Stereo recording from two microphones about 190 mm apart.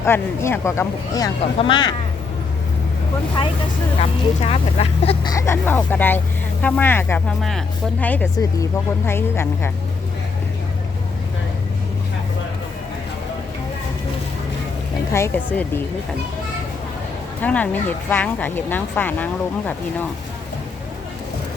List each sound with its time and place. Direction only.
0.0 s speech: 15° left (ahead or behind)
4.0 s speech: 30° left (ahead or behind)
5.3 s speech: 15° left (ahead or behind)
15.1 s speech: 15° left (ahead or behind)
17.4 s speech: 10° left (ahead or behind)